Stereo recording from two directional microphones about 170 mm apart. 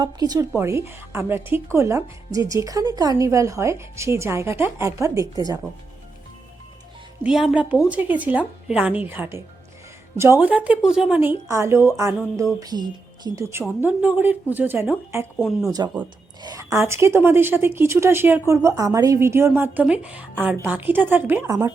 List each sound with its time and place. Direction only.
0.0 s a woman's voice: 20° right (ahead or behind)
7.2 s a woman's voice: 5° right (ahead or behind)